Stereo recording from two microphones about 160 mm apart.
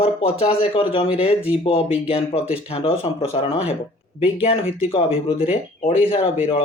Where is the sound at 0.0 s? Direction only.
40° left (ahead or behind).